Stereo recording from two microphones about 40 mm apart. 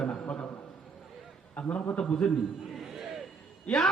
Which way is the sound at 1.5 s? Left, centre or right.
Left.